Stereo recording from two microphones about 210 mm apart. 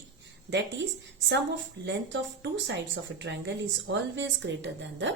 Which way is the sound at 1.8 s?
60° right (ahead or behind).